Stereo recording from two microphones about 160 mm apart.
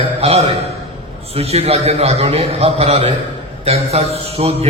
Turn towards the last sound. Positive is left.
turn(degrees=-40)  # may be behind; listen again after turning